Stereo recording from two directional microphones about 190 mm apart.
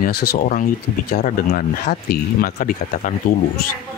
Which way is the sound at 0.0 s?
55° left (ahead or behind).